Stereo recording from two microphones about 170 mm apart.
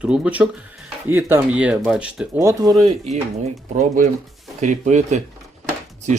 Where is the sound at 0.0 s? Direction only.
5° right (ahead or behind).